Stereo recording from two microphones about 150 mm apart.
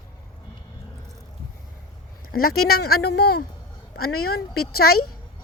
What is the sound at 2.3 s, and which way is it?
Speech, 85° left.